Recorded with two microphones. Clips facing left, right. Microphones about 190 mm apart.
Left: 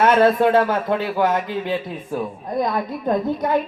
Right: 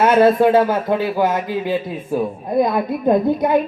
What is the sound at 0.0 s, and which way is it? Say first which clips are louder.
A man's voice: right 3 dB; 5° right (ahead or behind).